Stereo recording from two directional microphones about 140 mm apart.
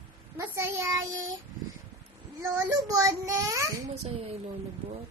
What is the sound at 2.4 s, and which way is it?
Child singing, 20° right (ahead or behind).